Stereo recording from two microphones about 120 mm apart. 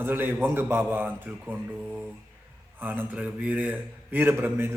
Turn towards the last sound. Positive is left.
turn(degrees=-20)  # may be behind; listen again after turning